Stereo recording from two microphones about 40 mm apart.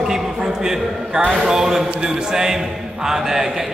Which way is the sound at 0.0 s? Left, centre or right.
Centre.